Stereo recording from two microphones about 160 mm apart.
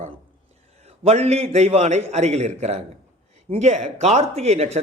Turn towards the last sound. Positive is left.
turn(degrees=-45)  # may be behind; listen again after turning